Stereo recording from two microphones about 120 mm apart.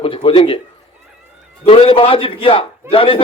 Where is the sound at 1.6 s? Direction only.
50° left (ahead or behind).